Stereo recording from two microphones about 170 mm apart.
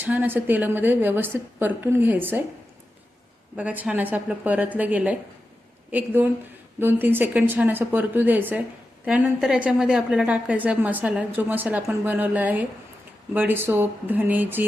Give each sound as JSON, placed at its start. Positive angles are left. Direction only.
{"t": 0.0, "sound": "a woman's voice", "side_deg": -10}
{"t": 3.5, "sound": "a woman's voice", "side_deg": -10}